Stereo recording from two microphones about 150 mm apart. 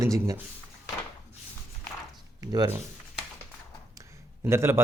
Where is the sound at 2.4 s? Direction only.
25° right (ahead or behind).